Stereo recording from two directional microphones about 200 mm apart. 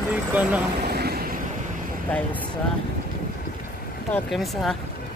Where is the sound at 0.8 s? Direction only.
50° right (ahead or behind).